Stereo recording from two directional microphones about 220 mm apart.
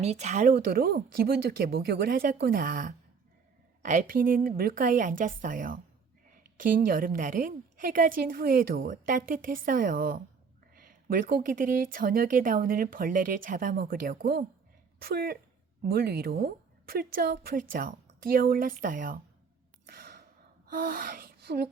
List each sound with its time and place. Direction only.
0.0 s a woman's voice: 30° right (ahead or behind)
19.9 s gasp: 45° right (ahead or behind)
20.7 s a sound: 40° right (ahead or behind)